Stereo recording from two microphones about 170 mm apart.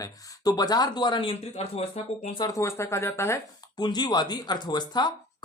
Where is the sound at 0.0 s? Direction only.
20° left (ahead or behind).